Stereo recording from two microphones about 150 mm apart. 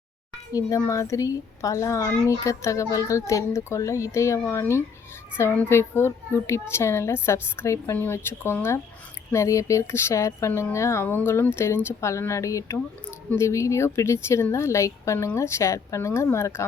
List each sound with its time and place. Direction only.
0.9 s speech: 20° left (ahead or behind)